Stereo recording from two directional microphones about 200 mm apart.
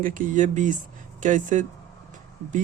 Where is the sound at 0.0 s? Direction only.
40° right (ahead or behind).